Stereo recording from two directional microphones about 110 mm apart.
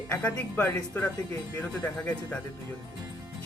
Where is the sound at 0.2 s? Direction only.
10° left (ahead or behind).